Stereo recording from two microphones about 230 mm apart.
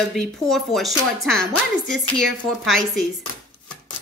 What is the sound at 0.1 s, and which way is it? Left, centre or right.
Speech, centre.